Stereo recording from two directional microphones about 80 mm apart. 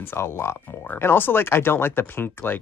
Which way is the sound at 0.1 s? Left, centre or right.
Left.